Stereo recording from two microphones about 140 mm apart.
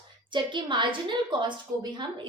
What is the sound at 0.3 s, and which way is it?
A woman's voice, 35° right (ahead or behind).